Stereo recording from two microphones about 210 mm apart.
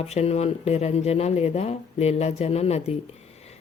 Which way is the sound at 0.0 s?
30° left (ahead or behind).